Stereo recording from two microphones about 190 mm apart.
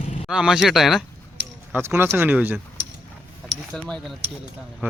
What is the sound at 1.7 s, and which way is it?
Speech, 10° right (ahead or behind).